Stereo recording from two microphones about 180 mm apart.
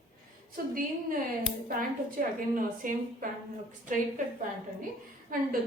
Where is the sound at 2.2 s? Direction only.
50° right (ahead or behind).